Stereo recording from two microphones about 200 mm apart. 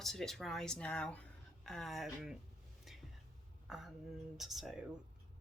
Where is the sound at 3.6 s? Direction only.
Centre (ahead or behind).